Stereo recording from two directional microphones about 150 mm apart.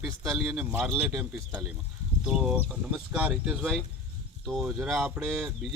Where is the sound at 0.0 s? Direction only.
5° right (ahead or behind).